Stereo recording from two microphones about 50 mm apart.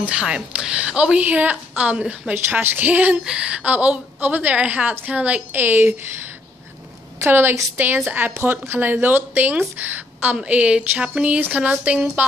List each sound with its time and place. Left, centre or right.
0.1 s a woman's voice: centre
2.6 s a woman's voice: right
3.3 s a woman's voice: right
5.5 s speech: right
7.2 s a woman's voice: right
8.4 s speech: right
9.0 s a woman's voice: right
10.3 s a woman's voice: right